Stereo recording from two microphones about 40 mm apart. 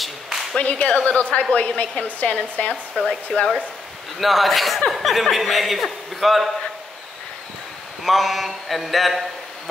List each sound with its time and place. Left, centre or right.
0.0 s a sound: centre
0.6 s a woman's voice: left
4.2 s a man's voice: centre
8.0 s a man's voice: centre